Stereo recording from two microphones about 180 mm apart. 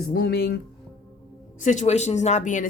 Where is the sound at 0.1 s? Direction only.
60° left (ahead or behind).